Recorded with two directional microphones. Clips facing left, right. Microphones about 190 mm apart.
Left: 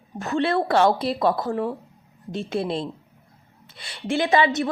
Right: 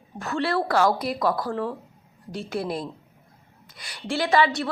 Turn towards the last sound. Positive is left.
turn(degrees=20)  # may be behind; listen again after turning